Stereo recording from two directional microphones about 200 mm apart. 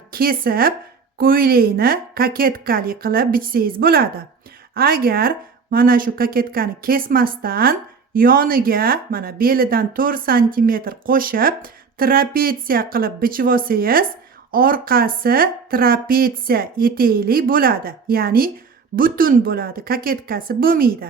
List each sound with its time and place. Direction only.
0.1 s a woman's voice: 45° right (ahead or behind)